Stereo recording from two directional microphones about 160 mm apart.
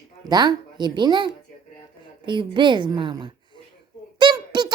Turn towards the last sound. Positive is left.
turn(degrees=-30)  # may be behind; listen again after turning